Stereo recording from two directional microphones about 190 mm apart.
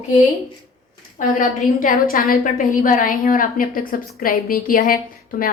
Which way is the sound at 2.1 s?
50° left (ahead or behind).